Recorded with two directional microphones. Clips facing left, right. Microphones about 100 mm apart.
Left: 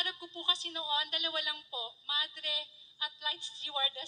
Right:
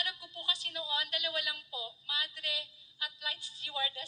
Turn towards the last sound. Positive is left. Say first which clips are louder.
# even
turn(degrees=25)  # may be behind; listen again after turning